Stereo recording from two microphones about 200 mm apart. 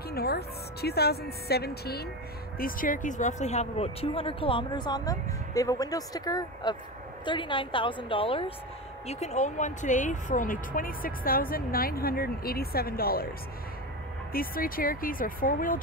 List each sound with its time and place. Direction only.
0.1 s speech: 50° left (ahead or behind)
2.6 s speech: 40° left (ahead or behind)
14.3 s speech: 45° left (ahead or behind)